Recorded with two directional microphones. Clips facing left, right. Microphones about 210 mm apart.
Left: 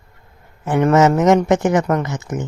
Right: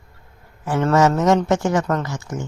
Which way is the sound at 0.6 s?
20° left (ahead or behind).